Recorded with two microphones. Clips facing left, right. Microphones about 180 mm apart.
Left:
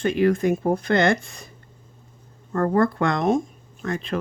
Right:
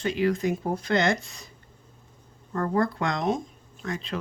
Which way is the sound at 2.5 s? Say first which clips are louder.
Left 5 dB; 50° left (ahead or behind).